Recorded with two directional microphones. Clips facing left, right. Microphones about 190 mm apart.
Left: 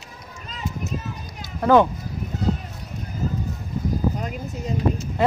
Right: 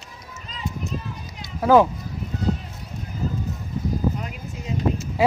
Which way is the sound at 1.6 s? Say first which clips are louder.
Even; 5° right (ahead or behind).